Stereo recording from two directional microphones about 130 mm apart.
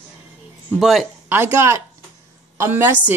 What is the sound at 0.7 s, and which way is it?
Speech, centre (ahead or behind).